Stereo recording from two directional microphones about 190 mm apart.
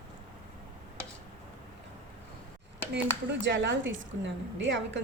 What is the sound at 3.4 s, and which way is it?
A woman's voice, 70° right (ahead or behind).